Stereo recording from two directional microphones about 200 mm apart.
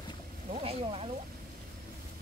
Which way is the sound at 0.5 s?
30° right (ahead or behind).